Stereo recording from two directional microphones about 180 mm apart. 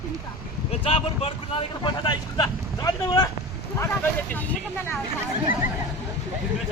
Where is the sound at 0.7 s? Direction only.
30° left (ahead or behind).